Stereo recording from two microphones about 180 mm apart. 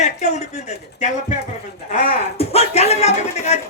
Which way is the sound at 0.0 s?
40° left (ahead or behind).